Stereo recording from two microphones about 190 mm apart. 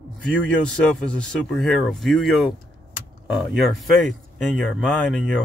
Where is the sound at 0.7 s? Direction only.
5° left (ahead or behind).